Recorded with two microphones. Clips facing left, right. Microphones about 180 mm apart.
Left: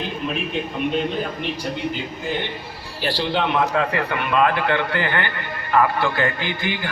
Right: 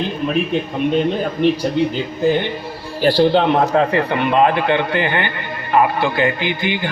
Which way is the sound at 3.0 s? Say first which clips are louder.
Right 9 dB; 45° right (ahead or behind).